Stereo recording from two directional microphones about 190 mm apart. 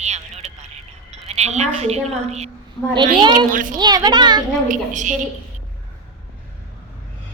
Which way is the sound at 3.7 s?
20° right (ahead or behind).